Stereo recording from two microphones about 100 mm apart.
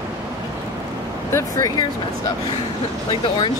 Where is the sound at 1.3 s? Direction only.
35° left (ahead or behind).